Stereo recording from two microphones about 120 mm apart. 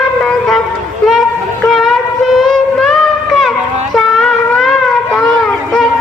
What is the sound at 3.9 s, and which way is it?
Shofar, 5° left (ahead or behind).